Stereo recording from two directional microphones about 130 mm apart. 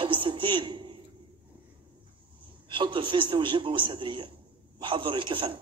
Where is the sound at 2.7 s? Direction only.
40° right (ahead or behind).